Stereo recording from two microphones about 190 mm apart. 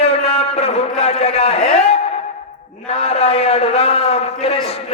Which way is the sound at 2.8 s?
30° left (ahead or behind).